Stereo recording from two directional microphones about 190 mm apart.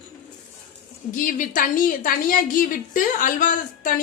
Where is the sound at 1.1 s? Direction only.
45° left (ahead or behind).